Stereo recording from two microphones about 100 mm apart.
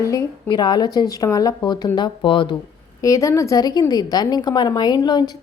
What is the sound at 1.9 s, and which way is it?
Speech, 55° left (ahead or behind).